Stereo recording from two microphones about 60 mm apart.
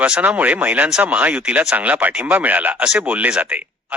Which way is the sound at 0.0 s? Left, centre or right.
Right.